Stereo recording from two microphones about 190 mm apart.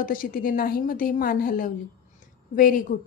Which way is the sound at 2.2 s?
45° left (ahead or behind).